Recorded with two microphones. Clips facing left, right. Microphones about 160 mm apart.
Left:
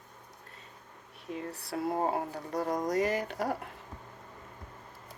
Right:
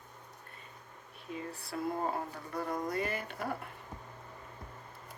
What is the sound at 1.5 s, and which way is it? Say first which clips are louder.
Speech: left 3 dB; 70° left (ahead or behind).